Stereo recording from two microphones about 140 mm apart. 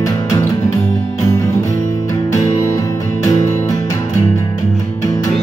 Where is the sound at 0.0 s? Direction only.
25° left (ahead or behind).